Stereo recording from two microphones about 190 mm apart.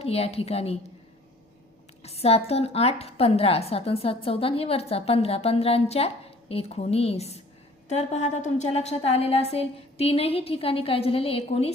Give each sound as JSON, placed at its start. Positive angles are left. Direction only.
{"t": 0.0, "sound": "a woman's voice", "side_deg": 30}
{"t": 2.0, "sound": "a woman's voice", "side_deg": 35}